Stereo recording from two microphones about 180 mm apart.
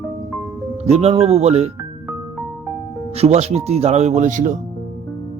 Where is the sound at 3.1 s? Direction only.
35° right (ahead or behind).